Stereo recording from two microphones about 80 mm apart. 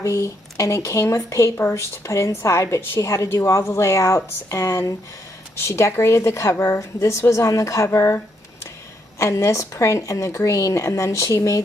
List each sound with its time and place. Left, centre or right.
0.0 s speech: left
9.2 s speech: left